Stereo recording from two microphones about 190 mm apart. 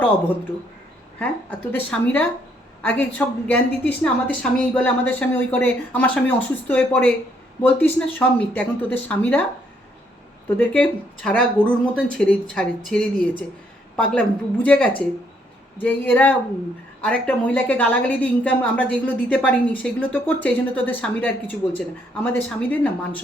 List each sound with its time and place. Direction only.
1.2 s a woman's voice: 10° left (ahead or behind)
10.6 s a woman's voice: 5° left (ahead or behind)